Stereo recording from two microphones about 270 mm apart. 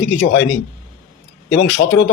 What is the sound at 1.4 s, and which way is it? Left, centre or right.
Speech, left.